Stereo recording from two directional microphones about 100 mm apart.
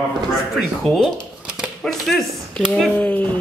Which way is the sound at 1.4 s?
10° right (ahead or behind).